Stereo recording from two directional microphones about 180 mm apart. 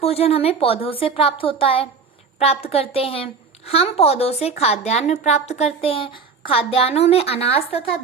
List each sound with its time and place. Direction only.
0.0 s speech: 35° left (ahead or behind)